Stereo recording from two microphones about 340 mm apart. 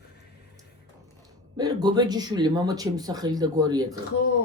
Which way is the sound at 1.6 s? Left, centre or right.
Centre.